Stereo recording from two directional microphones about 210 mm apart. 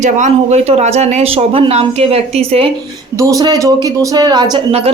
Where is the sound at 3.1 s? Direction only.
15° right (ahead or behind).